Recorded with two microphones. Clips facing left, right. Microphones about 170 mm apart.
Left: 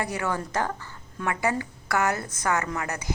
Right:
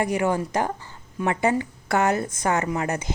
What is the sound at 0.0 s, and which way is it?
A woman's voice, 20° right (ahead or behind).